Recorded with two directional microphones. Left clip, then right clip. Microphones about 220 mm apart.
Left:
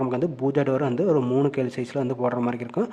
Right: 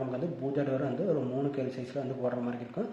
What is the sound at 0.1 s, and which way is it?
Speech, 40° left (ahead or behind).